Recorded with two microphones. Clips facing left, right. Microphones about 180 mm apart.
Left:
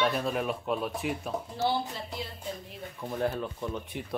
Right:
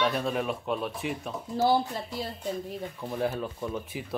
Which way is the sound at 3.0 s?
5° right (ahead or behind).